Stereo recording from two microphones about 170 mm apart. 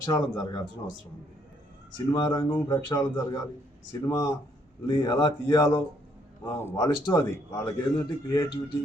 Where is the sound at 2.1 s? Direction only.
25° left (ahead or behind).